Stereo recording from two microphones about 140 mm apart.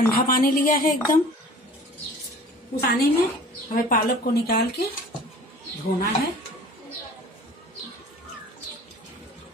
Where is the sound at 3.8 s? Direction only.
90° left.